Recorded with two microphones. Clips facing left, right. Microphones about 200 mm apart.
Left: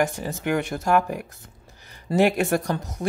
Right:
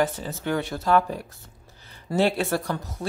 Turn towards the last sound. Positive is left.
turn(degrees=15)  # may be behind; listen again after turning